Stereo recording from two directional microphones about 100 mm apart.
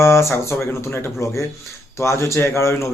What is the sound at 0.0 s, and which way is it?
A man's voice, 25° left (ahead or behind).